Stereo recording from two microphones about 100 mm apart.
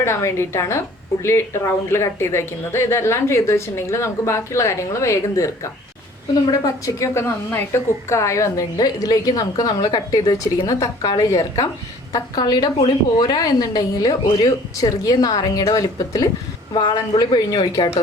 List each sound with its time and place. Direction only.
0.0 s speech: 25° left (ahead or behind)
6.8 s a woman's voice: 30° left (ahead or behind)
16.7 s speech: 45° left (ahead or behind)